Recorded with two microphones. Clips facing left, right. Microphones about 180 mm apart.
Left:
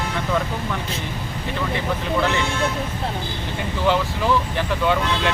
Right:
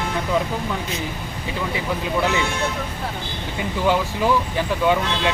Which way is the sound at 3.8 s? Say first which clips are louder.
Even; 15° right (ahead or behind).